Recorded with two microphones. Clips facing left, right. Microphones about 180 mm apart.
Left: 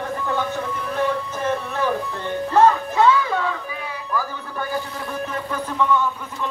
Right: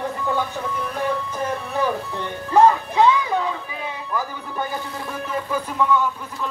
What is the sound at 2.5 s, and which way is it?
Music, 15° right (ahead or behind).